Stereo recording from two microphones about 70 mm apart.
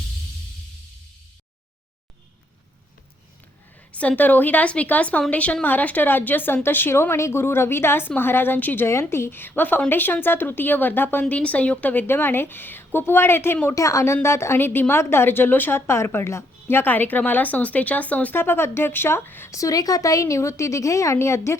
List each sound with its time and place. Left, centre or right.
3.9 s a woman's voice: left
13.7 s a woman's voice: left
15.9 s a woman's voice: left
18.3 s a woman's voice: left
19.5 s a woman's voice: left